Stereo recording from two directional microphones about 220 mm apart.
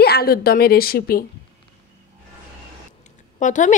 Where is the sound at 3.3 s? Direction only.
35° left (ahead or behind).